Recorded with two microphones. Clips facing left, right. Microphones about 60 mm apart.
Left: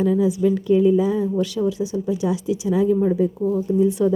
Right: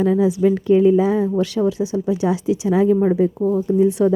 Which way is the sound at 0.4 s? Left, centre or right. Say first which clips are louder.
Right 3 dB; right.